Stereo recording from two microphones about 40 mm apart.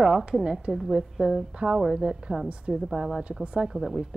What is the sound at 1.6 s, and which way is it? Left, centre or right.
A woman's voice, right.